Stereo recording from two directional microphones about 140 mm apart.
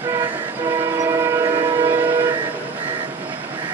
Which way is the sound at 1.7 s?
20° right (ahead or behind).